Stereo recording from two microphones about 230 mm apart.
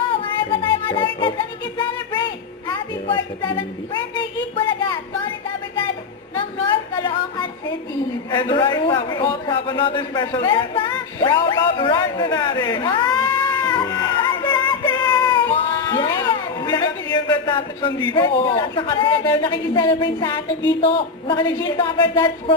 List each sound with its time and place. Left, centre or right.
0.1 s child singing: left
2.6 s a woman's voice: centre
3.9 s a sound: left
6.7 s music: centre
8.3 s a man's voice: centre
14.0 s music: centre
15.6 s a sound: left
18.1 s a man's voice: left